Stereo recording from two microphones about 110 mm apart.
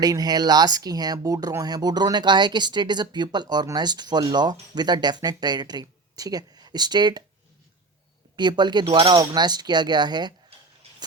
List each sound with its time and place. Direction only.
0.0 s speech: 35° right (ahead or behind)
8.4 s speech: 40° right (ahead or behind)